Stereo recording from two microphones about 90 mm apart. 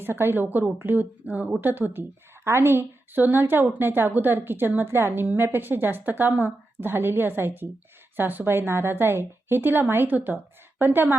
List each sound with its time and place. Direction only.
0.0 s a woman's voice: 25° right (ahead or behind)